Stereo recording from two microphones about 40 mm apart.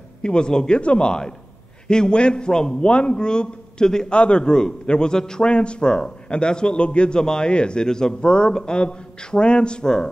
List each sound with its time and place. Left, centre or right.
0.2 s a man's voice: left
4.1 s a man's voice: left